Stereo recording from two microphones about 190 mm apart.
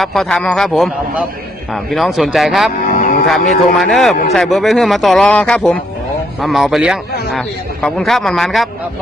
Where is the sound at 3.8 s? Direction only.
Centre (ahead or behind).